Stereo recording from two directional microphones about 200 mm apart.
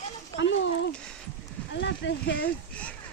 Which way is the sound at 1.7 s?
65° left (ahead or behind).